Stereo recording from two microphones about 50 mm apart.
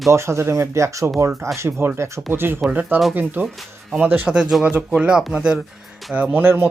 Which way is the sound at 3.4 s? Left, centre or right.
Right.